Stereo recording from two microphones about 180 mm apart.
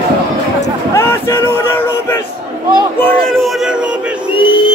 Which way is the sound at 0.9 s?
15° left (ahead or behind).